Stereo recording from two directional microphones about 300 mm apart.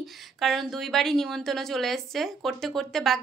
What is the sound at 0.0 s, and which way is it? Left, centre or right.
A woman's voice, centre.